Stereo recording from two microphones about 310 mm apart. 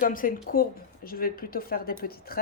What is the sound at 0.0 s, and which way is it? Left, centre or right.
Speech, left.